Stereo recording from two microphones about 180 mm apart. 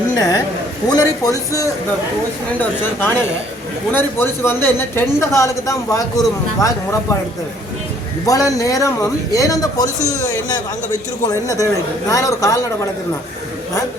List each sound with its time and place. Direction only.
0.2 s a man's voice: 20° left (ahead or behind)
8.3 s a man's voice: 20° left (ahead or behind)